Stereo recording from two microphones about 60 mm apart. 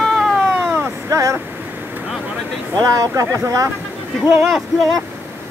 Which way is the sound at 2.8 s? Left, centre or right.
Right.